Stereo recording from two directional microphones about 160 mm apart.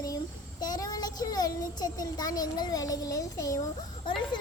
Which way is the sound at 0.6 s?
25° left (ahead or behind).